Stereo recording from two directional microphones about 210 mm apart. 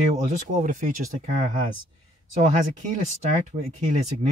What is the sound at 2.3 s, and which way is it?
Speech, 35° right (ahead or behind).